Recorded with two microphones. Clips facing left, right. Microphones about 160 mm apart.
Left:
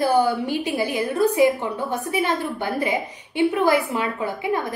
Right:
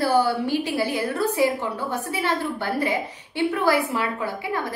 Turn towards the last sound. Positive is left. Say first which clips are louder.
# left 3 dB
turn(degrees=20)  # may be behind; listen again after turning